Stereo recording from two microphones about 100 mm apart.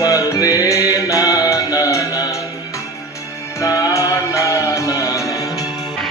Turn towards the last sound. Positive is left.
turn(degrees=30)  # may be behind; listen again after turning